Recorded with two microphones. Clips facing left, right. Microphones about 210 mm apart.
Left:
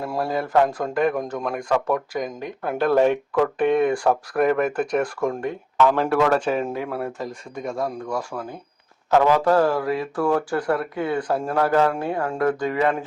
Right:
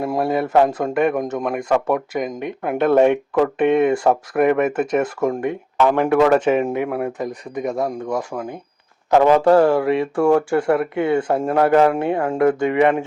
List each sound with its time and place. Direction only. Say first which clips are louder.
0.0 s a man's voice: right 5 dB; 20° right (ahead or behind)